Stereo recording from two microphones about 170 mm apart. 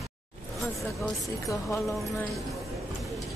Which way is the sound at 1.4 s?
20° left (ahead or behind).